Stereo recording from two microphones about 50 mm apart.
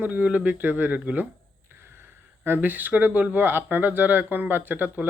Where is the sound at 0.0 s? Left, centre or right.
Right.